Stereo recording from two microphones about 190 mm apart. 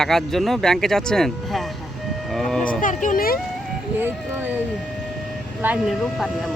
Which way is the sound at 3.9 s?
10° right (ahead or behind).